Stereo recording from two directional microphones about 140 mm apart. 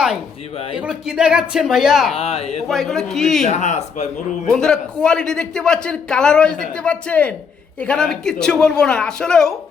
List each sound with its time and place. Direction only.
0.5 s speech: 40° left (ahead or behind)
0.8 s speech: 5° right (ahead or behind)
2.1 s speech: 45° left (ahead or behind)
2.6 s speech: centre (ahead or behind)
3.5 s speech: 55° left (ahead or behind)
4.5 s a man's voice: 5° left (ahead or behind)